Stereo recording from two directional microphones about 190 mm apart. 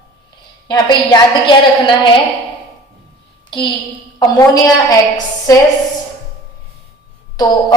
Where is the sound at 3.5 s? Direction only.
25° left (ahead or behind).